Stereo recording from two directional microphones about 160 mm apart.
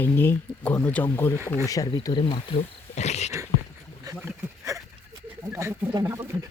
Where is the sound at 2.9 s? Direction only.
45° left (ahead or behind).